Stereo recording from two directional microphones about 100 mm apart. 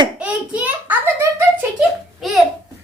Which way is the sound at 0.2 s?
15° right (ahead or behind).